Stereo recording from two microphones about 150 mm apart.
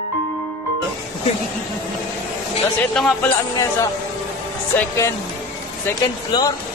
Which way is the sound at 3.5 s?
25° left (ahead or behind).